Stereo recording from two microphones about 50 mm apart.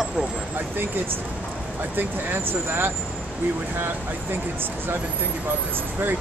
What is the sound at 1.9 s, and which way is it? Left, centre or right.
Speech, right.